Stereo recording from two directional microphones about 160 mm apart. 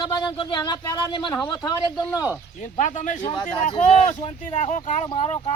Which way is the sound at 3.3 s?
30° left (ahead or behind).